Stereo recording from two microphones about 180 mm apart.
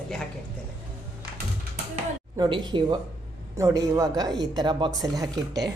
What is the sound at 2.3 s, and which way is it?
A woman's voice, 25° right (ahead or behind).